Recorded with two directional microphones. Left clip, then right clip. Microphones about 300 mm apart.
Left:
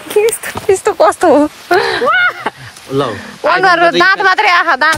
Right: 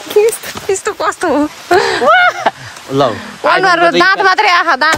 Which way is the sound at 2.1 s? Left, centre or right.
Centre.